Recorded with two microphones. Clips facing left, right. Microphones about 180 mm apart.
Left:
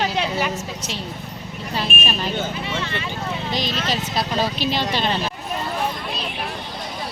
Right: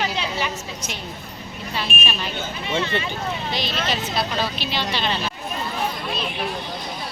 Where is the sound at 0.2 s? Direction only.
50° left (ahead or behind).